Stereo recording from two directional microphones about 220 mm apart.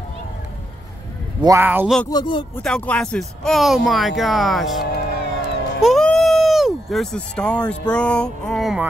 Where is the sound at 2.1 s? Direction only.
20° left (ahead or behind).